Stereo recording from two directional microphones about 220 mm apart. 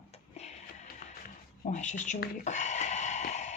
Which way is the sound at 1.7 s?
35° left (ahead or behind).